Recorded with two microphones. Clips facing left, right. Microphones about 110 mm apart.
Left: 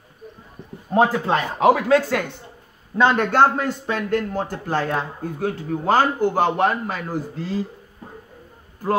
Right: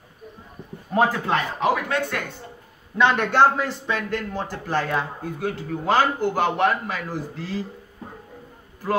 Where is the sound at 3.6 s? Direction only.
50° left (ahead or behind).